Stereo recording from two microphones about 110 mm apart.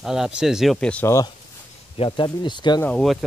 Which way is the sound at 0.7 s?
10° left (ahead or behind).